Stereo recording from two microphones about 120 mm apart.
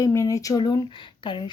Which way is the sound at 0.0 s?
25° left (ahead or behind).